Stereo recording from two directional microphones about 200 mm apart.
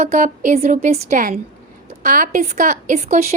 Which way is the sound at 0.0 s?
40° right (ahead or behind).